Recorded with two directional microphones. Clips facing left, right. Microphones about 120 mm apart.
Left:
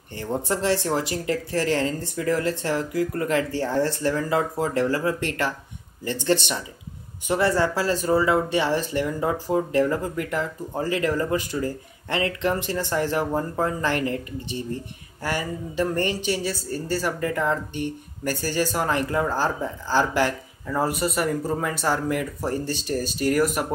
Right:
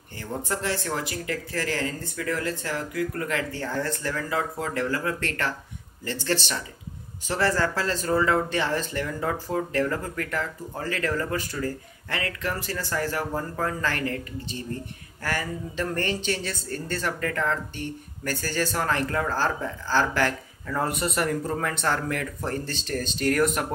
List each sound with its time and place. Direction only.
0.1 s speech: 25° left (ahead or behind)
20.8 s speech: 5° left (ahead or behind)